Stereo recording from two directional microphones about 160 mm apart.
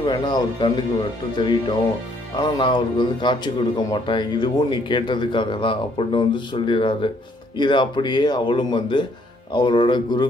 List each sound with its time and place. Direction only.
0.0 s speech: 30° left (ahead or behind)